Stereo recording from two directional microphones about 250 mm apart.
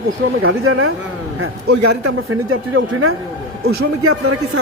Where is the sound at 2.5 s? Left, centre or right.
Right.